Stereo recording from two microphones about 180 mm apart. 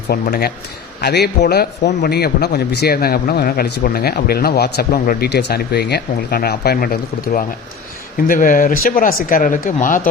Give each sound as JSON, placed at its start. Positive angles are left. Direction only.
{"t": 0.1, "sound": "a man's voice", "side_deg": 60}